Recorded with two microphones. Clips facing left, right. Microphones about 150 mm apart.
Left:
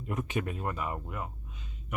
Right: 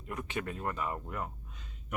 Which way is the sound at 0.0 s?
20° left (ahead or behind).